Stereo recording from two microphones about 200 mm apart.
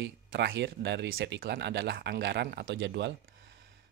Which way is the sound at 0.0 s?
55° right (ahead or behind).